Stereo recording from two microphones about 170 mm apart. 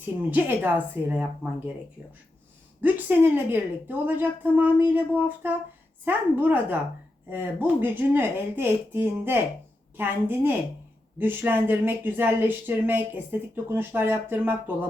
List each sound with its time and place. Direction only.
0.0 s a woman's voice: 10° right (ahead or behind)
2.8 s a woman's voice: 10° right (ahead or behind)